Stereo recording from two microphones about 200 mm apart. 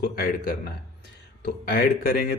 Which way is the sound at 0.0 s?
45° left (ahead or behind).